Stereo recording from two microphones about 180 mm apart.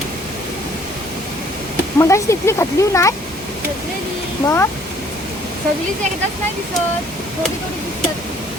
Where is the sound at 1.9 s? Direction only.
15° left (ahead or behind).